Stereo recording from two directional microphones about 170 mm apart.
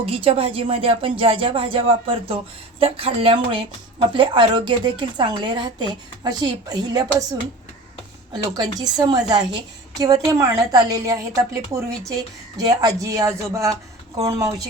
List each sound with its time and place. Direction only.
0.0 s a woman's voice: 35° right (ahead or behind)
8.3 s a woman's voice: 25° right (ahead or behind)